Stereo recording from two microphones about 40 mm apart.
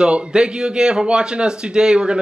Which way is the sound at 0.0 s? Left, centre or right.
Right.